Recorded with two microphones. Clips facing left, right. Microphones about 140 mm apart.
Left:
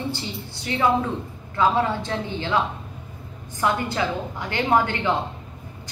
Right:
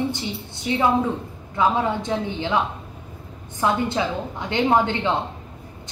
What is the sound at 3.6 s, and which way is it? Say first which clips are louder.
A woman's voice: right 2 dB; 20° right (ahead or behind).